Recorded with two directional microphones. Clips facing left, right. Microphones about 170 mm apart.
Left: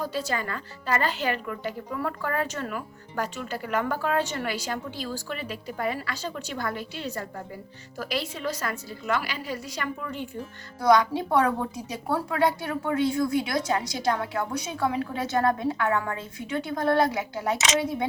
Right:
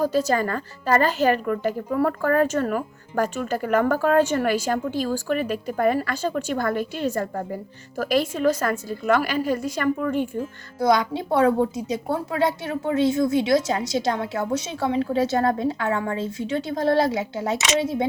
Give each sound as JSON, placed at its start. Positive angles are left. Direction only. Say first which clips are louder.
{"t": 0.0, "sound": "a woman's voice", "louder": "right 8 dB", "side_deg": -40}
{"t": 11.1, "sound": "a woman's voice", "louder": "right 4 dB", "side_deg": -25}